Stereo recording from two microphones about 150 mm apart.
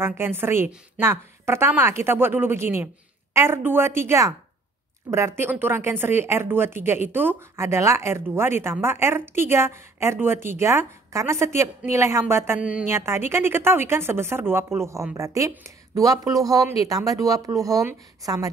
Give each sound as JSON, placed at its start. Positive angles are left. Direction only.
{"t": 0.0, "sound": "a woman's voice", "side_deg": -15}